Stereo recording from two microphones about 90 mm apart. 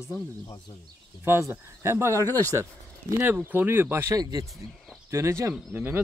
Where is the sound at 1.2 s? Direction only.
25° right (ahead or behind).